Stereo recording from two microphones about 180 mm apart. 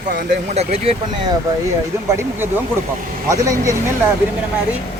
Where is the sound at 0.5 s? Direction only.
35° right (ahead or behind).